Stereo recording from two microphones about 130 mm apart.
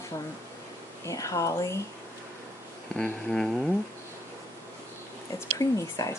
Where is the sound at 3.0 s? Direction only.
5° left (ahead or behind).